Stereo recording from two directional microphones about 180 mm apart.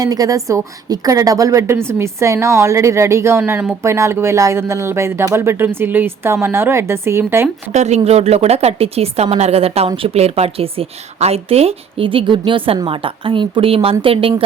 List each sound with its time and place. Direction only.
0.0 s a woman's voice: 20° right (ahead or behind)
7.7 s a woman's voice: 40° right (ahead or behind)